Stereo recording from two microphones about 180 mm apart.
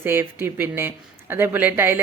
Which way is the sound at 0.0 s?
10° right (ahead or behind).